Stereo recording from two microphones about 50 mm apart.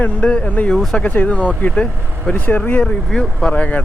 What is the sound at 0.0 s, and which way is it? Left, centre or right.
Speech, left.